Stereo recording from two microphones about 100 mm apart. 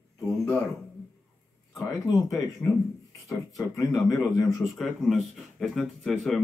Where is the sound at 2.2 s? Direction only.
30° left (ahead or behind).